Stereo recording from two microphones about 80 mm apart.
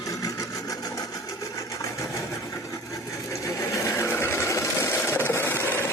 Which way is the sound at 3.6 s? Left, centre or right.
Left.